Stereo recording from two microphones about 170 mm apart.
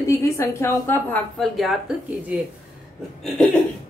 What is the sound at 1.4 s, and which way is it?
Speech, centre (ahead or behind).